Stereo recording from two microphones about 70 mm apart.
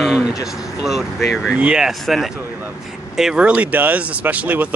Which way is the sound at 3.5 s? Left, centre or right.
Right.